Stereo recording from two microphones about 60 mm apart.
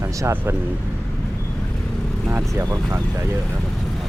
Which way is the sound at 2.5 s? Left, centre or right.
Right.